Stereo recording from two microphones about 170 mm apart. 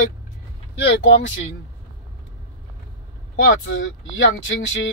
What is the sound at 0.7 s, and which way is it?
Speech, 90° left.